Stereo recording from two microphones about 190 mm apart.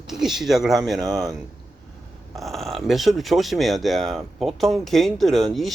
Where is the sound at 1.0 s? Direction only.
20° right (ahead or behind).